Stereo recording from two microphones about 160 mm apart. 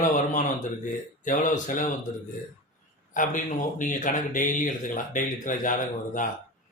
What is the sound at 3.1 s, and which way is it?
Speech, 55° left (ahead or behind).